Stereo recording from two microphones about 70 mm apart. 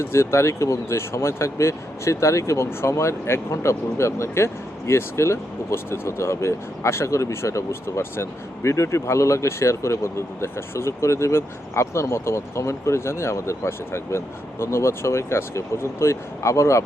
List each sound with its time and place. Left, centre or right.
0.0 s speech: left